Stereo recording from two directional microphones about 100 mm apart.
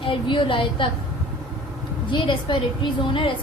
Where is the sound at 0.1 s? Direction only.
55° left (ahead or behind).